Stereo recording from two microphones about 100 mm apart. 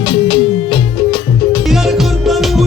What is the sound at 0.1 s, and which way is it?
Music, 65° left (ahead or behind).